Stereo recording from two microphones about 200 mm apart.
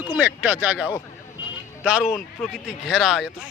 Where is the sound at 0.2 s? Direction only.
10° right (ahead or behind).